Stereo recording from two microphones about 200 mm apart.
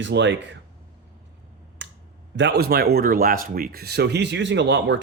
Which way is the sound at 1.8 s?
65° right (ahead or behind).